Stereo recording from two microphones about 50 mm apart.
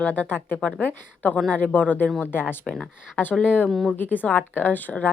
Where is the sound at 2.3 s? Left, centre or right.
Left.